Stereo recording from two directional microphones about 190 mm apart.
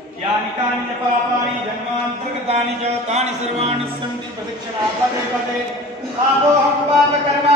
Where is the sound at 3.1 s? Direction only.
35° right (ahead or behind).